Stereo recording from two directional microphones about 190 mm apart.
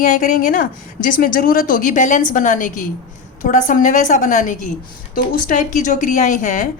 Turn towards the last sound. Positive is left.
turn(degrees=40)  # may be behind; listen again after turning